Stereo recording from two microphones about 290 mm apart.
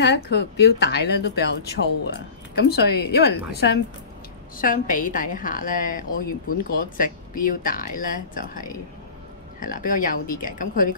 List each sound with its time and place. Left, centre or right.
0.0 s a woman's voice: left